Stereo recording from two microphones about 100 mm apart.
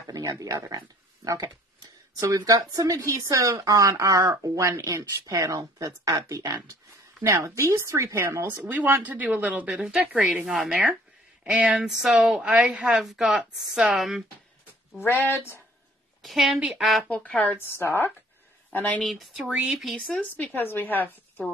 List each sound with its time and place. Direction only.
0.0 s speech: 35° right (ahead or behind)
7.2 s speech: 25° right (ahead or behind)
8.7 s a woman's voice: 20° right (ahead or behind); by 14.2 s 5° right (ahead or behind)
15.2 s a woman's voice: 20° left (ahead or behind)
16.2 s speech: centre (ahead or behind)
17.1 s a woman's voice: 15° left (ahead or behind)
19.0 s speech: centre (ahead or behind)
20.2 s a woman's voice: 20° left (ahead or behind)